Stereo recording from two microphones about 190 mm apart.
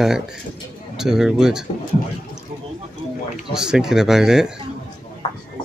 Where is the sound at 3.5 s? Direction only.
5° right (ahead or behind).